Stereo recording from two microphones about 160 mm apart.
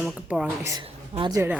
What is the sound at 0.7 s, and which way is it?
Speech, 25° right (ahead or behind).